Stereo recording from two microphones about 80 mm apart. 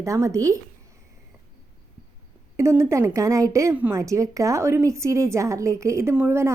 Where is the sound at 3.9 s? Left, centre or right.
Right.